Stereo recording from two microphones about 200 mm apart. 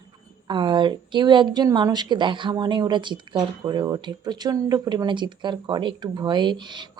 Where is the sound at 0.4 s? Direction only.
25° right (ahead or behind).